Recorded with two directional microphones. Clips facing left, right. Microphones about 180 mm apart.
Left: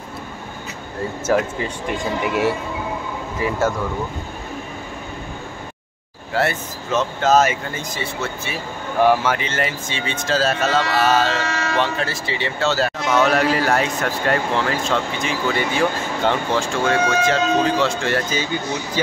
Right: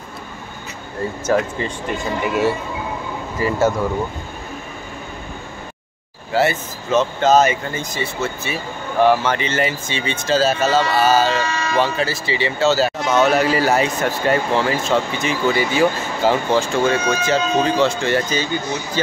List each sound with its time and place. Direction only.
1.2 s a man's voice: 5° left (ahead or behind)
6.3 s a man's voice: centre (ahead or behind)
11.4 s a sound: 75° left (ahead or behind)
11.8 s a man's voice: centre (ahead or behind)